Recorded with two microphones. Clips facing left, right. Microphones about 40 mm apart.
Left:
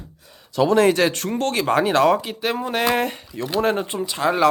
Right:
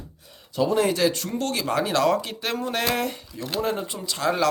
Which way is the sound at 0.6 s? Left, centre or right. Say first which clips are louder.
Left 6 dB; left.